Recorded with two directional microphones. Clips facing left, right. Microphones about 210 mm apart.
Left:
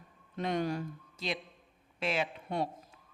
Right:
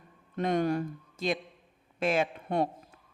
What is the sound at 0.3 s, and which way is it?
Speech, 50° right (ahead or behind).